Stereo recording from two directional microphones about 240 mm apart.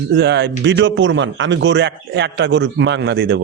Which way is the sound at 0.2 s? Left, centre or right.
Right.